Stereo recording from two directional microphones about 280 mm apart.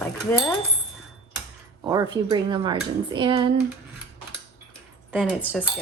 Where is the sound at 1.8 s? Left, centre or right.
Centre.